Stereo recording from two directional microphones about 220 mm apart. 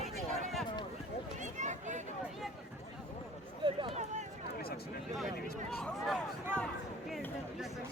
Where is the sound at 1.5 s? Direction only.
35° right (ahead or behind).